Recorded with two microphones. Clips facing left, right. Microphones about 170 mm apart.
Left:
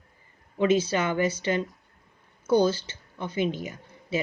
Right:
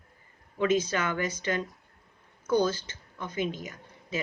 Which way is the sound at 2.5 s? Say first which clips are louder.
Left 4 dB; 30° left (ahead or behind).